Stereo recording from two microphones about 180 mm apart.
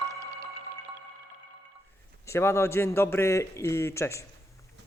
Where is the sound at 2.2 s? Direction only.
15° left (ahead or behind).